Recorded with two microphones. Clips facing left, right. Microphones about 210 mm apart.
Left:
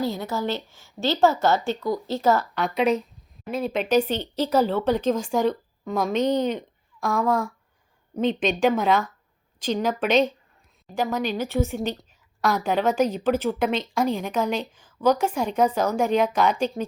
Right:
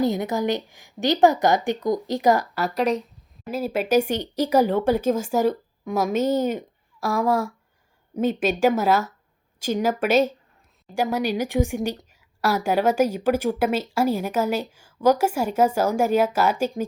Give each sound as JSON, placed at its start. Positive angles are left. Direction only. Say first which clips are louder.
{"t": 0.0, "sound": "a woman's voice", "louder": "right 4 dB", "side_deg": -20}
{"t": 2.6, "sound": "a woman's voice", "louder": "left 1 dB", "side_deg": 0}